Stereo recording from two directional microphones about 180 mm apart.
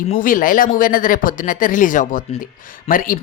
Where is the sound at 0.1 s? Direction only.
50° left (ahead or behind).